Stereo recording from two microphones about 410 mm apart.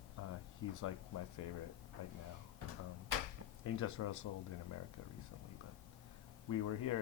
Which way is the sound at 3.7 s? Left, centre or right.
Left.